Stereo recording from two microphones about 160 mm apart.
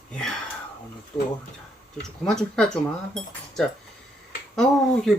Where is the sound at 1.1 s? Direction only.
35° left (ahead or behind).